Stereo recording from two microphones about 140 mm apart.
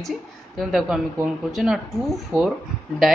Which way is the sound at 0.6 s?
Centre (ahead or behind).